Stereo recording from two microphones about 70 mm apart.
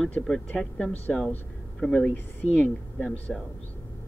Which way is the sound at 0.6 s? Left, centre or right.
Left.